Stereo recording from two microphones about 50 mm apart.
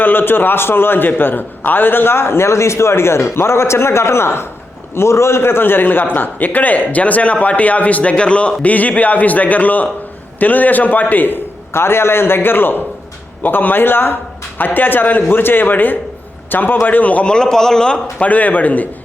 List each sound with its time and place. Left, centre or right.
0.0 s a man's voice: left
4.9 s a man's voice: left
17.2 s a man's voice: centre
18.2 s a man's voice: left